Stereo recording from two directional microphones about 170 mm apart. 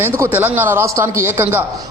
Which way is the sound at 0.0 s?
15° right (ahead or behind).